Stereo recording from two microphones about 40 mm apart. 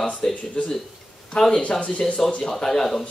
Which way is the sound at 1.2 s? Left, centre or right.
Left.